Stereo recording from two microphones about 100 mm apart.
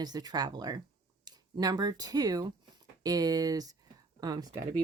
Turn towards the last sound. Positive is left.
turn(degrees=-40)  # may be behind; listen again after turning